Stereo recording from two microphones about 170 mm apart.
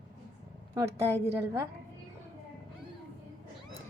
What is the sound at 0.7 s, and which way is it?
Speech, 15° right (ahead or behind).